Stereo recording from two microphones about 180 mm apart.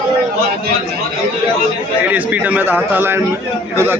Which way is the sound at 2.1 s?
10° right (ahead or behind).